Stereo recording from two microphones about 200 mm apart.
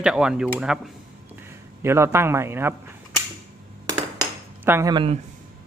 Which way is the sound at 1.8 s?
15° right (ahead or behind).